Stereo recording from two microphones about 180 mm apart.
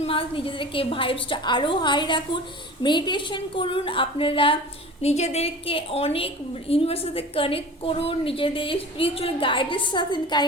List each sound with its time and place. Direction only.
0.0 s a woman's voice: 30° left (ahead or behind)